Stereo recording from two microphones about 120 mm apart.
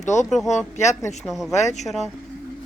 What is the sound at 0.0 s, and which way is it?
Speech, 80° left.